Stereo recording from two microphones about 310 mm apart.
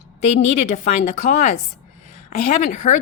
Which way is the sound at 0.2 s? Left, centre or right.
Left.